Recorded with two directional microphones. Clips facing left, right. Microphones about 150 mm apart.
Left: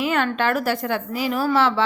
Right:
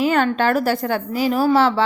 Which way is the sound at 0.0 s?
35° right (ahead or behind).